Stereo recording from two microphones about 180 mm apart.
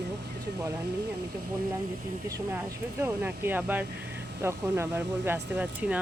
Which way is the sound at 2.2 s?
20° right (ahead or behind).